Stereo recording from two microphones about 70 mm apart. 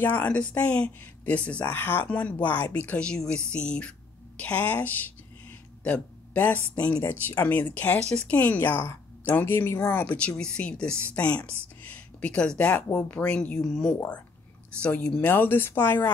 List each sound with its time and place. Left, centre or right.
0.0 s speech: left
0.3 s a woman's voice: centre; by 9.8 s left
10.0 s speech: centre
13.9 s speech: left
15.2 s speech: left